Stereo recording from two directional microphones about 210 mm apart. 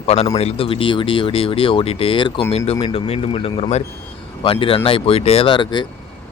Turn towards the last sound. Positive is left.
turn(degrees=20)  # may be behind; listen again after turning